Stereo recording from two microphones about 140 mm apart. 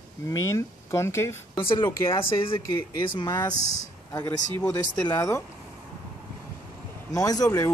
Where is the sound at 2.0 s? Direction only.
40° left (ahead or behind).